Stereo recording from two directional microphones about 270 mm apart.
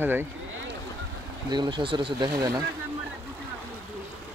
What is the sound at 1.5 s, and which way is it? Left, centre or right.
Speech, centre.